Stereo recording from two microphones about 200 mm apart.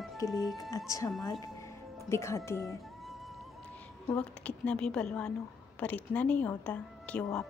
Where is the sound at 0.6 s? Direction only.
15° left (ahead or behind).